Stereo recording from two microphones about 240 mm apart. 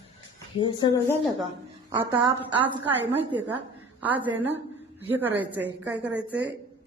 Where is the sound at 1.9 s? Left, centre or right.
Centre.